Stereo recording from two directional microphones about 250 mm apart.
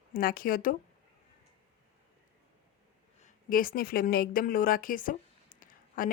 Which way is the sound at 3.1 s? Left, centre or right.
Left.